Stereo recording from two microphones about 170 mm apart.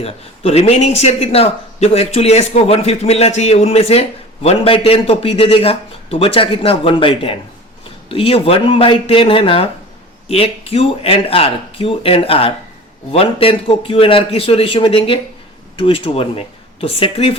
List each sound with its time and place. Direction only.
0.0 s a man's voice: 35° left (ahead or behind)